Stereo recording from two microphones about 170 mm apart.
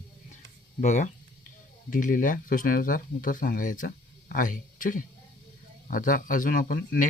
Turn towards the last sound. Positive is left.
turn(degrees=55)  # may be behind; listen again after turning